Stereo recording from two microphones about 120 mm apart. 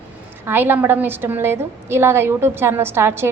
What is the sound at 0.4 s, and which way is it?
A woman's voice, 20° right (ahead or behind).